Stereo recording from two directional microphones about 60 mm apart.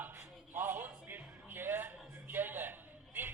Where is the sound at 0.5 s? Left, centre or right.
Right.